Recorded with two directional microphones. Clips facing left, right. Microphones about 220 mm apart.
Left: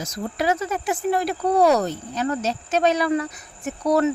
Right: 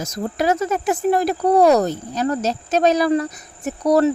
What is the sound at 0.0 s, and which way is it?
Speech, 45° right (ahead or behind).